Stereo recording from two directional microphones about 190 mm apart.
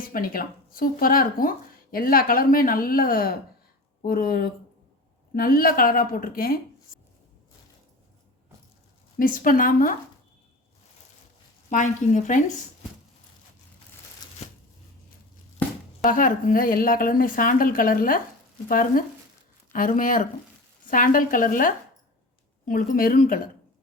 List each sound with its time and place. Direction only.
0.1 s speech: 50° left (ahead or behind)
9.1 s speech: 45° left (ahead or behind)
11.7 s speech: 40° left (ahead or behind)
14.2 s a sound: 20° left (ahead or behind)
16.0 s speech: 45° left (ahead or behind)